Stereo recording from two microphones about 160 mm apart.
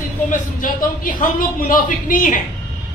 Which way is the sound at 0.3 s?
60° left (ahead or behind).